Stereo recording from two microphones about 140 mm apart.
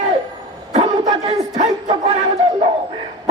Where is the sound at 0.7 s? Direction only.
40° right (ahead or behind).